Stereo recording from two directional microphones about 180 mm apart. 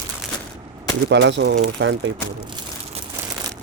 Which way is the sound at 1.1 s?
80° right.